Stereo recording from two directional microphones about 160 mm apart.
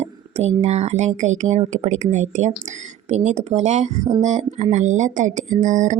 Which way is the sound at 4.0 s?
20° right (ahead or behind).